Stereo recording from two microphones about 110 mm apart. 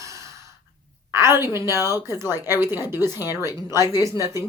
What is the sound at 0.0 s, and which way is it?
Gasp, 30° right (ahead or behind).